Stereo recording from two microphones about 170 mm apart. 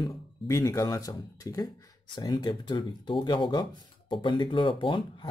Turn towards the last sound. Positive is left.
turn(degrees=30)  # may be behind; listen again after turning